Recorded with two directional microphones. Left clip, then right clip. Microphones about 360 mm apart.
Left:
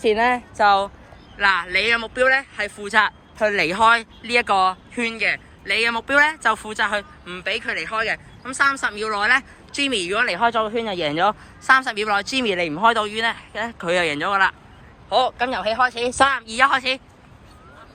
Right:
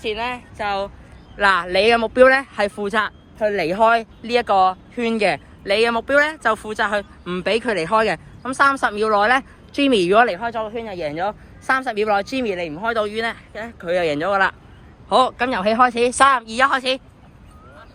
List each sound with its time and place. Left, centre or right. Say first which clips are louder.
0.0 s speech: left 6 dB; left
1.4 s speech: right 2 dB; centre
10.3 s speech: left 5 dB; centre
15.3 s speech: right 3 dB; centre
16.3 s speech: right 1 dB; centre